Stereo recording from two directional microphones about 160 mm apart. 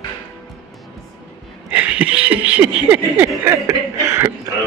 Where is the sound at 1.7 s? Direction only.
10° right (ahead or behind).